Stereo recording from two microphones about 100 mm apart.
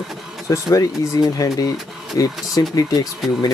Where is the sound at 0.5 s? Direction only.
35° left (ahead or behind).